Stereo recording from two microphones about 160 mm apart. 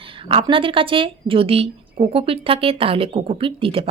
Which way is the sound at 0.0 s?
35° right (ahead or behind).